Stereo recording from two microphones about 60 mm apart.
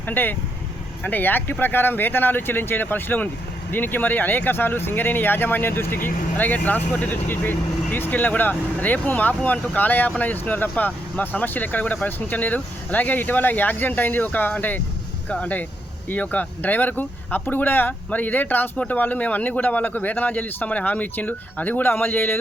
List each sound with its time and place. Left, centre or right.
0.0 s a man's voice: left